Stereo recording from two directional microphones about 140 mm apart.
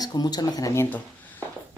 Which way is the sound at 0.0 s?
30° left (ahead or behind).